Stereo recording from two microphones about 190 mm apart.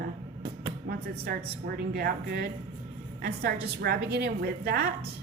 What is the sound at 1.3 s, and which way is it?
A woman's voice, 50° right (ahead or behind).